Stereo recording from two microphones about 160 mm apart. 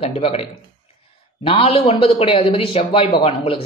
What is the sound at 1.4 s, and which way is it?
A man's voice, 35° left (ahead or behind).